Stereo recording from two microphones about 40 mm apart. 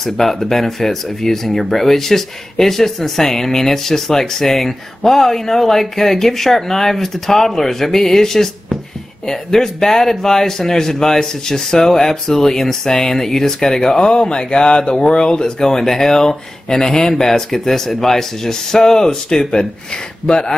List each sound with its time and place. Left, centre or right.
0.0 s speech: centre